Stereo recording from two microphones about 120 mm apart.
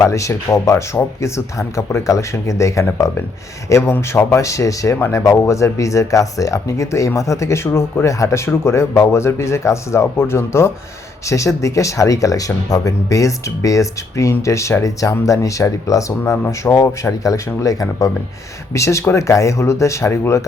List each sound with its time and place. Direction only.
0.0 s speech: 25° left (ahead or behind)